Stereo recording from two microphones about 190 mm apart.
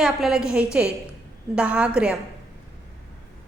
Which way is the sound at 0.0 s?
5° right (ahead or behind).